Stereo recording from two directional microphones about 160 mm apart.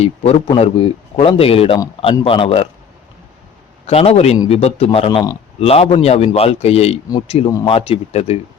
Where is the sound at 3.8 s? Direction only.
40° left (ahead or behind).